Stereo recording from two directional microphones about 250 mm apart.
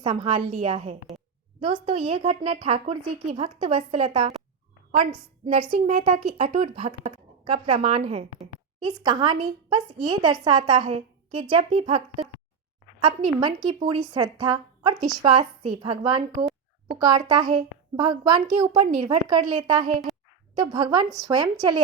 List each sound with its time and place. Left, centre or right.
0.0 s speech: centre
5.7 s a child's voice: right